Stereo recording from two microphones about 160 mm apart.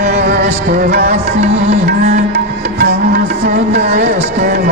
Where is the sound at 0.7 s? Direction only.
90° right.